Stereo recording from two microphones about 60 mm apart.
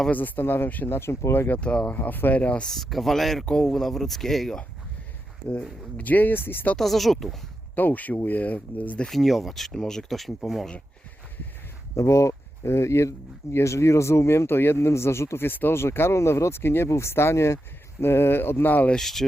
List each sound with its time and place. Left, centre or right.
0.1 s speech: left
0.9 s speech: left
1.6 s speech: centre
1.9 s speech: left
2.6 s speech: centre
6.0 s speech: left
6.7 s speech: centre
7.8 s speech: left
9.0 s speech: centre
11.9 s speech: left
15.4 s speech: left
18.0 s speech: left
18.9 s speech: centre